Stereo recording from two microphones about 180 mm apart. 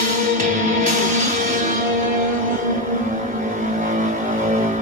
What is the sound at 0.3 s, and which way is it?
Music, 45° right (ahead or behind).